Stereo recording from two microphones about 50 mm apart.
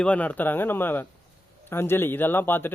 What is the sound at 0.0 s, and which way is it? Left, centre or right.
A man's voice, left.